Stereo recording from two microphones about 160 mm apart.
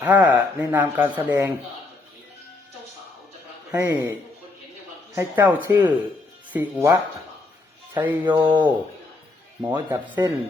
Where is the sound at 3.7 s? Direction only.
15° right (ahead or behind).